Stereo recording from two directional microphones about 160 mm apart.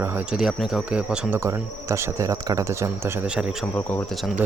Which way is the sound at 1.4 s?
15° right (ahead or behind).